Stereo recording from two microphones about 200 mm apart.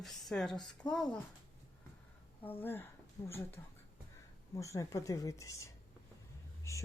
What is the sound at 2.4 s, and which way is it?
Speech, 10° left (ahead or behind).